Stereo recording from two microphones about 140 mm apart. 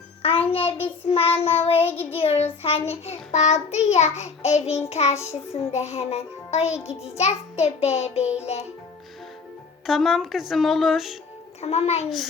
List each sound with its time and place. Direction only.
0.2 s child singing: 45° left (ahead or behind)
1.9 s child singing: 15° left (ahead or behind)
2.1 s child singing: 50° left (ahead or behind)
9.8 s speech: centre (ahead or behind)
11.6 s child singing: 50° left (ahead or behind)
12.0 s speech: centre (ahead or behind)